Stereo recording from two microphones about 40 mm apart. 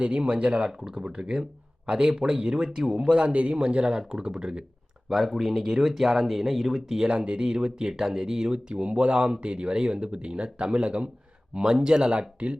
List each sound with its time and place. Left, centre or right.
0.0 s speech: right
5.0 s speech: centre
7.1 s speech: right